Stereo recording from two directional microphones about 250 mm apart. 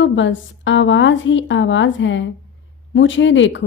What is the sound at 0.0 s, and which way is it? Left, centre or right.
A woman's voice, left.